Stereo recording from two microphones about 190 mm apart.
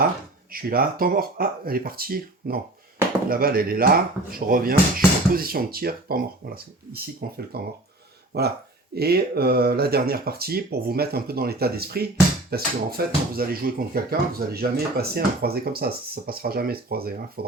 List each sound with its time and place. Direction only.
0.5 s speech: 50° right (ahead or behind)